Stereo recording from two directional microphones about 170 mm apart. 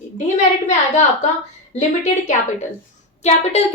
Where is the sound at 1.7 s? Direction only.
45° left (ahead or behind).